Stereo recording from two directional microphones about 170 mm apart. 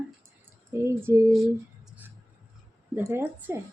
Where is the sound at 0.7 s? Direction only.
15° right (ahead or behind).